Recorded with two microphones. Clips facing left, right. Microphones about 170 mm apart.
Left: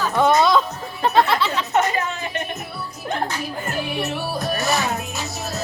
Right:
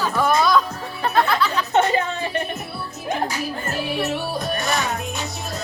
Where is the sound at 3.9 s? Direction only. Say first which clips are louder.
Right 1 dB; centre (ahead or behind).